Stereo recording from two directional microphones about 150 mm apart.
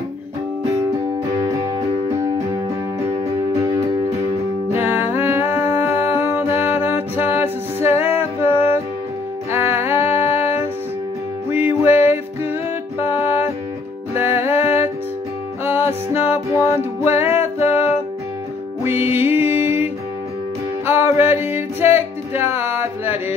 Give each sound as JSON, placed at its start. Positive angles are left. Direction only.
{"t": 3.5, "sound": "music", "side_deg": -20}
{"t": 9.5, "sound": "music", "side_deg": -15}
{"t": 10.1, "sound": "music", "side_deg": 45}
{"t": 10.4, "sound": "music", "side_deg": -15}
{"t": 11.8, "sound": "music", "side_deg": -15}
{"t": 14.1, "sound": "music", "side_deg": -15}
{"t": 19.1, "sound": "music", "side_deg": -15}